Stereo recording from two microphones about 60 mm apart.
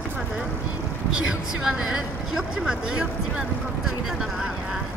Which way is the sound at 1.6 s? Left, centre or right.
Centre.